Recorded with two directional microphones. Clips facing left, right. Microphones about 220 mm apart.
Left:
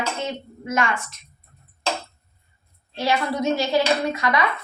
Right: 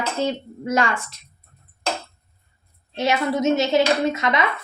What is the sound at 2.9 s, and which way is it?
Speech, 20° right (ahead or behind).